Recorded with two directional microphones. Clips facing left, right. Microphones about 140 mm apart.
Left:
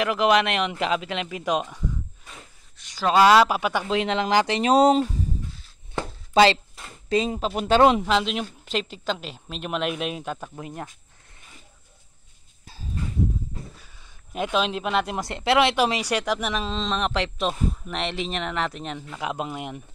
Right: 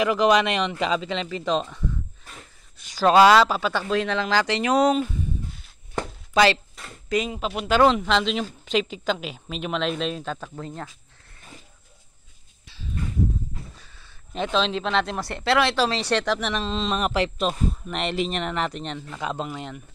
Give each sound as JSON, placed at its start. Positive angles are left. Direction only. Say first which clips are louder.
{"t": 0.0, "sound": "a man's voice", "louder": "right 1 dB", "side_deg": 5}
{"t": 3.3, "sound": "speech", "louder": "even", "side_deg": 10}
{"t": 6.3, "sound": "speech", "louder": "left 2 dB", "side_deg": 25}
{"t": 7.8, "sound": "speech", "louder": "even", "side_deg": 20}
{"t": 8.1, "sound": "a man's voice", "louder": "right 1 dB", "side_deg": 5}
{"t": 12.6, "sound": "a sound", "louder": "even", "side_deg": 45}
{"t": 13.7, "sound": "speech", "louder": "even", "side_deg": 10}